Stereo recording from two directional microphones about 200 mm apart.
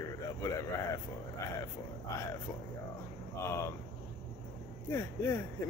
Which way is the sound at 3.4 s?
15° left (ahead or behind).